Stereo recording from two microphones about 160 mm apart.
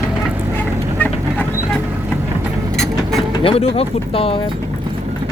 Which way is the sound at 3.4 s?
35° left (ahead or behind).